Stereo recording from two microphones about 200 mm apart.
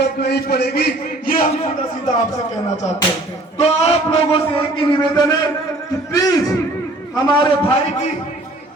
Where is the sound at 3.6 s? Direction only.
30° left (ahead or behind).